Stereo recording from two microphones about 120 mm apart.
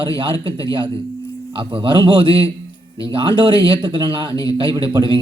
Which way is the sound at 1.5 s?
45° right (ahead or behind).